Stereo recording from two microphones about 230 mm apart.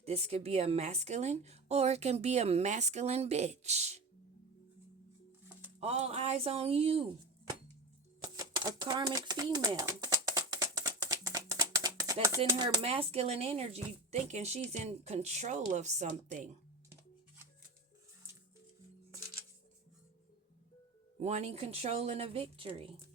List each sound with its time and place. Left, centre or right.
0.0 s speech: right
5.8 s speech: right
8.2 s typewriter: centre
12.5 s speech: centre
21.2 s speech: right